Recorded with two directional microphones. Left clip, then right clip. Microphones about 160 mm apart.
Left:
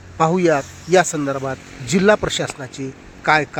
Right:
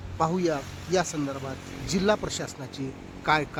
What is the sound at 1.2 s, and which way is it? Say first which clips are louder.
Speech: left 10 dB; 20° left (ahead or behind).